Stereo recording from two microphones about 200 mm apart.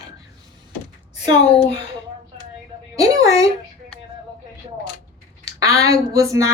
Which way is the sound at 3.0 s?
15° right (ahead or behind).